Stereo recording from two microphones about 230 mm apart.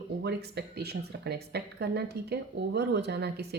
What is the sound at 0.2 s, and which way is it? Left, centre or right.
Speech, right.